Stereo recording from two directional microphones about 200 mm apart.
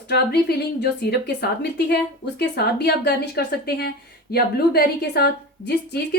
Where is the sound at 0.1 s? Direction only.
55° left (ahead or behind).